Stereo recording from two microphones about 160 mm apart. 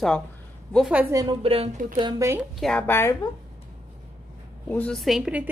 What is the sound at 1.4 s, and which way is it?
Speech, 35° right (ahead or behind).